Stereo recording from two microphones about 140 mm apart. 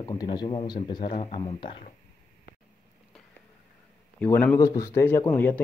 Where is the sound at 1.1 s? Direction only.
45° left (ahead or behind).